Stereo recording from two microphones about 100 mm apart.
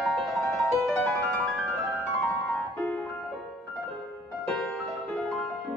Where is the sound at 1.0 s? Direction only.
15° left (ahead or behind).